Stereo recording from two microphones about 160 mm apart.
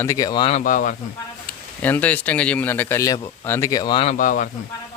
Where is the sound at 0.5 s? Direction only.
55° left (ahead or behind).